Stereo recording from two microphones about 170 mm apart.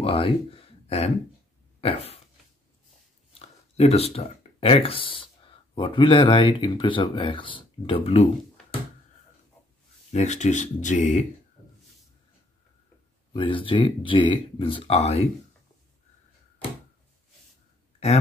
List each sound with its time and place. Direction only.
0.0 s speech: 35° left (ahead or behind)
1.8 s a sound: 35° left (ahead or behind)
3.3 s speech: 35° left (ahead or behind)
10.1 s speech: 45° left (ahead or behind)
13.3 s speech: 30° left (ahead or behind)